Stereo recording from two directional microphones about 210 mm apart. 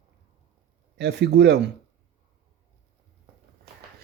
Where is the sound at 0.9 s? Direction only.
55° right (ahead or behind).